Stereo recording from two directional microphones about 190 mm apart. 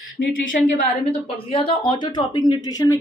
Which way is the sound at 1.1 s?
30° left (ahead or behind).